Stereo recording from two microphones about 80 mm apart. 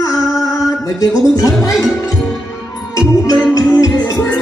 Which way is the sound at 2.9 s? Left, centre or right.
Left.